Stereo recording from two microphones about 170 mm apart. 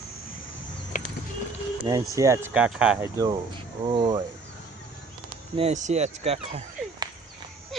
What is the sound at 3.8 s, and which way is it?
Speech, 30° right (ahead or behind).